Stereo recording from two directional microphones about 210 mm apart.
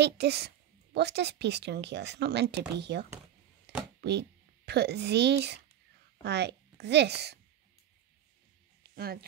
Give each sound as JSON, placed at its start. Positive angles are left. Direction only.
{"t": 0.0, "sound": "speech", "side_deg": -50}
{"t": 3.7, "sound": "a sound", "side_deg": -50}
{"t": 4.0, "sound": "a woman's voice", "side_deg": -50}
{"t": 8.8, "sound": "music", "side_deg": -50}